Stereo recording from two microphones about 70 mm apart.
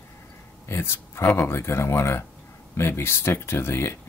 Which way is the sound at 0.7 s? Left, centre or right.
Left.